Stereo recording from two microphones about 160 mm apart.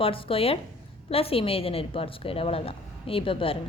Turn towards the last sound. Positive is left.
turn(degrees=35)  # may be behind; listen again after turning